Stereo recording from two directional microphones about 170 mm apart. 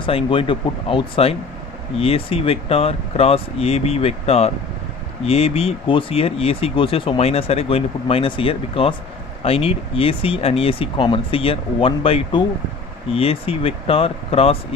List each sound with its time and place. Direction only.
0.0 s speech: 30° left (ahead or behind)